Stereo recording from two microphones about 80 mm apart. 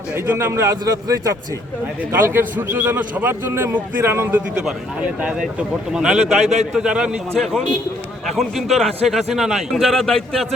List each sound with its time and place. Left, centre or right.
0.3 s speech: right
0.7 s a man's voice: right
2.1 s a man's voice: right
5.9 s a man's voice: centre
8.4 s a man's voice: centre